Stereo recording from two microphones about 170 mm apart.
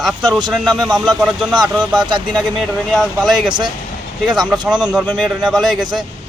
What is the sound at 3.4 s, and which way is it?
Speech, 25° right (ahead or behind).